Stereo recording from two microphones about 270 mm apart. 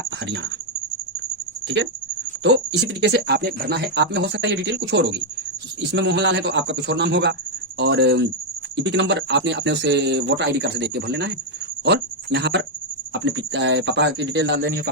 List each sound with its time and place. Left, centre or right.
1.6 s speech: right